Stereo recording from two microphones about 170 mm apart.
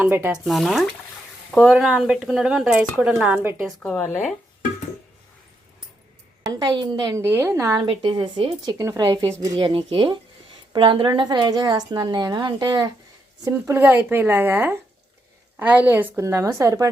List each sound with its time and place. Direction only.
0.0 s a woman's voice: 10° right (ahead or behind)
0.4 s speech: centre (ahead or behind)
3.8 s speech: 5° left (ahead or behind)
6.4 s a woman's voice: 25° right (ahead or behind)